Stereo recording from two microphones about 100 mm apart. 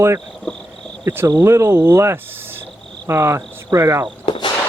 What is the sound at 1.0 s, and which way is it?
Speech, 20° right (ahead or behind).